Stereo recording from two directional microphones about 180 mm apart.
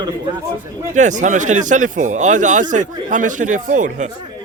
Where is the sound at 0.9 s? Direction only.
45° right (ahead or behind).